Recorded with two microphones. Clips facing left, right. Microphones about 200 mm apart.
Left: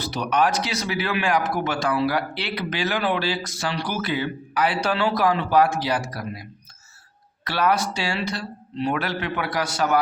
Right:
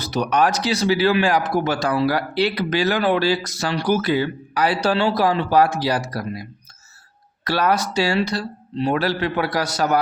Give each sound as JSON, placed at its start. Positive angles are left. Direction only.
{"t": 0.0, "sound": "a man's voice", "side_deg": -40}
{"t": 7.4, "sound": "a man's voice", "side_deg": -40}